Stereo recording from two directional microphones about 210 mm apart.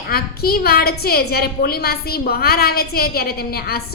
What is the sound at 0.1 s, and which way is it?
A woman's voice, 45° left (ahead or behind).